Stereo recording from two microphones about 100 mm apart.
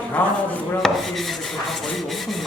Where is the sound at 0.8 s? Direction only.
Centre (ahead or behind).